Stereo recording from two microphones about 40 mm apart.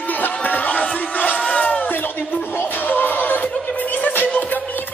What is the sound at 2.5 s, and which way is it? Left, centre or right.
Music, left.